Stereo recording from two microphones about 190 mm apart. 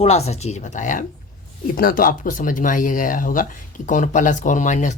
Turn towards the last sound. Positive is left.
turn(degrees=40)  # may be behind; listen again after turning